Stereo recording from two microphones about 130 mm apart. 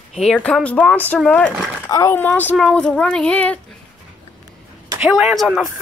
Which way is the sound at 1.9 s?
25° left (ahead or behind).